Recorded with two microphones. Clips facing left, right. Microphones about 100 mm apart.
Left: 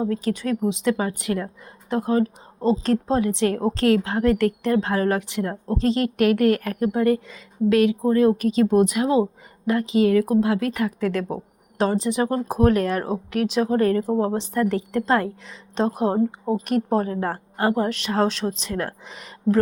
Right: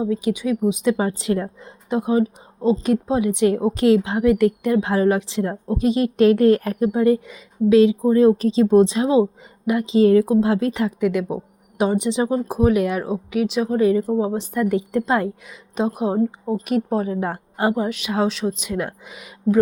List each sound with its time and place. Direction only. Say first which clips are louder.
0.0 s a woman's voice: right 2 dB; 10° right (ahead or behind)
12.3 s a woman's voice: even; 5° right (ahead or behind)
17.7 s a woman's voice: even; 5° right (ahead or behind)